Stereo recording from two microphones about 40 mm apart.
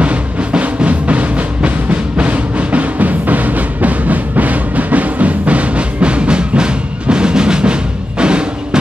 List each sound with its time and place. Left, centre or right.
0.0 s music: right